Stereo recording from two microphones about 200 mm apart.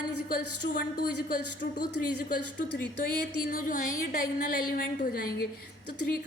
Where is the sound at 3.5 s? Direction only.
45° left (ahead or behind).